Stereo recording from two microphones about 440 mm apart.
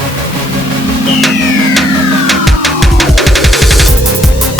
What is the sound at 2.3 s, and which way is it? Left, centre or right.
Music, centre.